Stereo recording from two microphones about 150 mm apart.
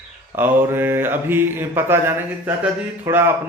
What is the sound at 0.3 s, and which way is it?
Speech, 15° right (ahead or behind).